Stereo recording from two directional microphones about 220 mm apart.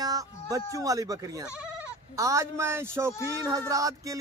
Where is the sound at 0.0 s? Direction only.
15° right (ahead or behind).